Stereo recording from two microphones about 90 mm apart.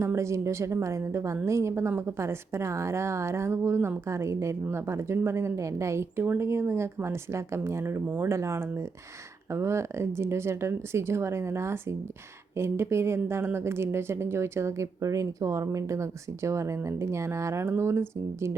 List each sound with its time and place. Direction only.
0.0 s a woman's voice: 30° right (ahead or behind)